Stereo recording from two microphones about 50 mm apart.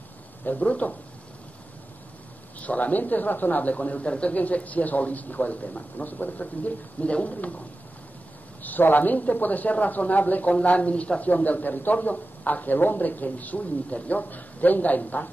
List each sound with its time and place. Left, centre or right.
0.6 s speech: left
2.6 s speech: left
8.6 s speech: left